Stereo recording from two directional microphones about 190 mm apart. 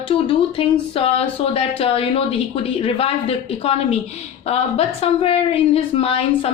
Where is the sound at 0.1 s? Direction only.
30° left (ahead or behind).